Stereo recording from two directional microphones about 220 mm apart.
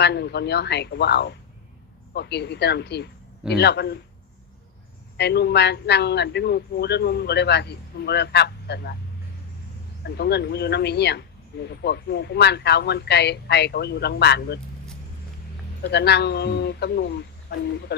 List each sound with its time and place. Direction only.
0.0 s a man's voice: 50° left (ahead or behind)
5.1 s a man's voice: 50° left (ahead or behind)
10.2 s a man's voice: 50° left (ahead or behind)
15.8 s a man's voice: 50° left (ahead or behind)